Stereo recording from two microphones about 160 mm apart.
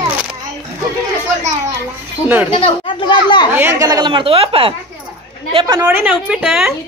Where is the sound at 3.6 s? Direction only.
20° right (ahead or behind).